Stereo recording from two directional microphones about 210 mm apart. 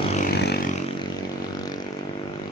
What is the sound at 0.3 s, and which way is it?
Vehicle, 50° left (ahead or behind).